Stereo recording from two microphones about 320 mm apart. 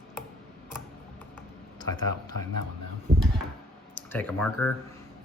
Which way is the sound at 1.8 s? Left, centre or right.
Centre.